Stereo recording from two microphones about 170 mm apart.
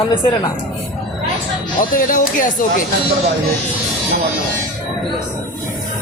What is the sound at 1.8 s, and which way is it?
Speech, 50° left (ahead or behind).